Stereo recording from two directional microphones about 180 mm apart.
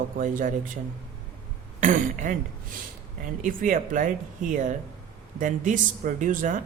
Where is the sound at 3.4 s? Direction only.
50° right (ahead or behind).